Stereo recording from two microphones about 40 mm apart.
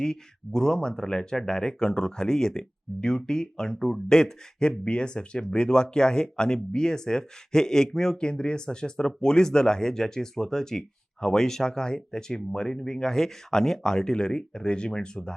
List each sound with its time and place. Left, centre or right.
0.0 s speech: centre
8.2 s speech: left